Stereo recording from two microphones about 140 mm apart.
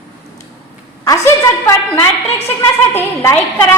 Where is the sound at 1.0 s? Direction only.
20° left (ahead or behind).